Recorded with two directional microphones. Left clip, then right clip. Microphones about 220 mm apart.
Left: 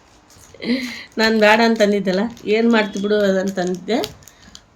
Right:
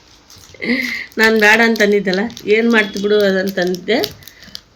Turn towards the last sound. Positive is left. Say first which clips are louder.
# right 5 dB
turn(degrees=-5)  # may be behind; listen again after turning